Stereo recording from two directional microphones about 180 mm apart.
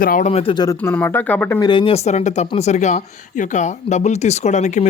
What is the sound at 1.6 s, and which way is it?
Speech, 30° left (ahead or behind).